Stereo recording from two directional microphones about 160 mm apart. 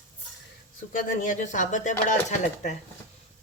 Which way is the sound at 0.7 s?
55° left (ahead or behind).